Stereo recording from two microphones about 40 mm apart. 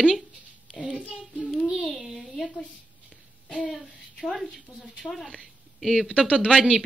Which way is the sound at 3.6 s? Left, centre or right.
Centre.